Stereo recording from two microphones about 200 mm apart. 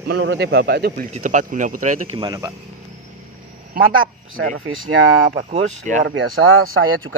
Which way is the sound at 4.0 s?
90° right.